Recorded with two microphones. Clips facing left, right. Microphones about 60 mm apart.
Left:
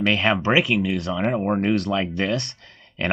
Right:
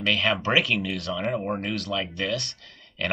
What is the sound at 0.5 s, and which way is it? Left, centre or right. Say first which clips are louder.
Speech: left 4 dB; centre.